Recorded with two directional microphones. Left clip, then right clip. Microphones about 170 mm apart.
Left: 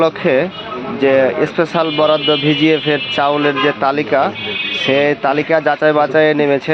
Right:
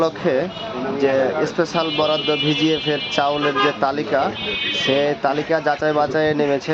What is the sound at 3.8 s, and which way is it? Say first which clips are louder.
Speech: left 5 dB; 10° left (ahead or behind).